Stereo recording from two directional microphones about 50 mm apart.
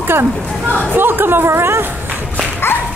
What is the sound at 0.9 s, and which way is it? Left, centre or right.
Speech, right.